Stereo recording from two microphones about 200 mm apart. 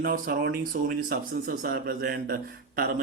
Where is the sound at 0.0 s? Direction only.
45° right (ahead or behind).